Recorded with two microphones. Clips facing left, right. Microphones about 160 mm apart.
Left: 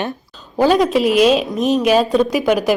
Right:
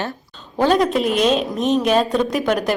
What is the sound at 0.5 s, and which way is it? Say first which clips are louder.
A woman's voice: left 3 dB; 5° left (ahead or behind).